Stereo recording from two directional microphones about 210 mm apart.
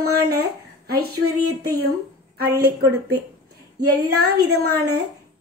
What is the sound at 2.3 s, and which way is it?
Speech, 50° right (ahead or behind).